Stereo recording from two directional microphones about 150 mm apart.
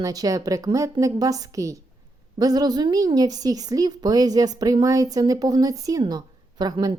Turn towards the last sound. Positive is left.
turn(degrees=-25)  # may be behind; listen again after turning